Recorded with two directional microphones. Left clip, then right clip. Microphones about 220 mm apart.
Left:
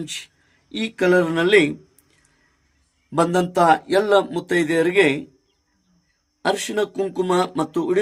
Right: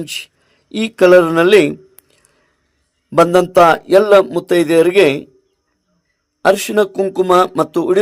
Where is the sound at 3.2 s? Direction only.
35° right (ahead or behind).